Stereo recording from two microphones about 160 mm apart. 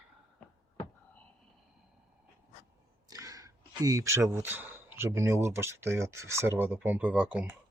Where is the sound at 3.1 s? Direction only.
20° right (ahead or behind).